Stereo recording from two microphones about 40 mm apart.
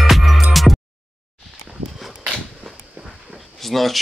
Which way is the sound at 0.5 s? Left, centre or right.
Centre.